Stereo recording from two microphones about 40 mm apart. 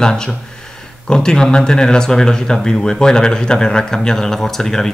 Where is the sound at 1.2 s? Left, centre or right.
Centre.